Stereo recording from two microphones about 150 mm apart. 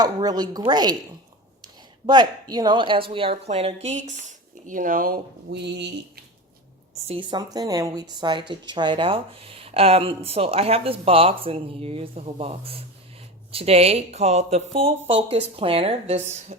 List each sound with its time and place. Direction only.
0.0 s a woman's voice: 25° right (ahead or behind); by 5.8 s 90° right
7.1 s speech: 30° right (ahead or behind); by 16.6 s 50° right (ahead or behind)